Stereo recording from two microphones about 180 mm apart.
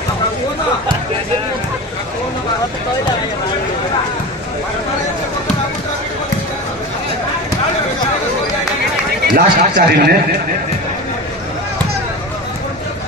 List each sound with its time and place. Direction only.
9.2 s speech: 55° right (ahead or behind)